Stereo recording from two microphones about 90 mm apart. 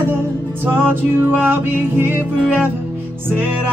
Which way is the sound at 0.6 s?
25° right (ahead or behind).